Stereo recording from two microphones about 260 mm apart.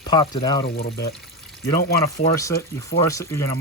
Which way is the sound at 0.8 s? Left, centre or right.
Left.